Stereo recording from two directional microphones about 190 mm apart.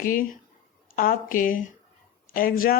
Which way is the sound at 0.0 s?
45° left (ahead or behind).